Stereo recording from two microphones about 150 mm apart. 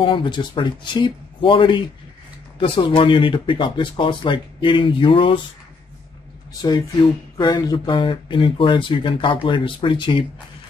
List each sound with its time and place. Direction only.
0.0 s speech: 35° left (ahead or behind)
6.6 s speech: 25° left (ahead or behind)